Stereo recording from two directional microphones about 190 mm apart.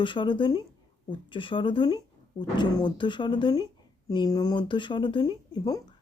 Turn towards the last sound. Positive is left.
turn(degrees=20)  # may be behind; listen again after turning